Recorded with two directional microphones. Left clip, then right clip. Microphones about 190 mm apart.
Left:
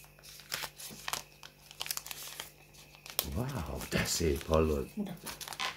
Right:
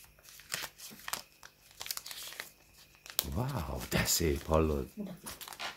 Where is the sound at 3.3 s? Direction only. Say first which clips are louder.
Right 1 dB; 55° right (ahead or behind).